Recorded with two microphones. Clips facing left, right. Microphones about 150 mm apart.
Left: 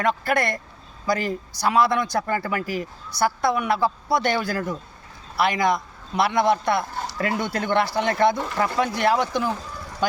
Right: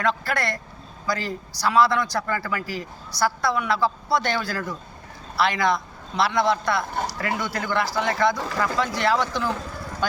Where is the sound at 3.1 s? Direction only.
20° left (ahead or behind).